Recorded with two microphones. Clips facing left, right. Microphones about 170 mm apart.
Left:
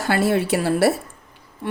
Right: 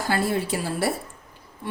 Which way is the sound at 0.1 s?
70° left (ahead or behind).